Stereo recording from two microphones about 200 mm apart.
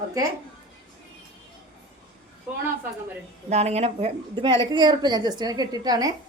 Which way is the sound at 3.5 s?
30° right (ahead or behind).